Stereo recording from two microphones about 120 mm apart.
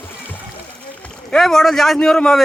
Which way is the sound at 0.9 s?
10° left (ahead or behind).